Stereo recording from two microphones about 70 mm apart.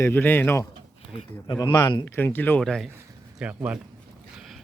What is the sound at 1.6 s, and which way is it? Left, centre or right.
Speech, left.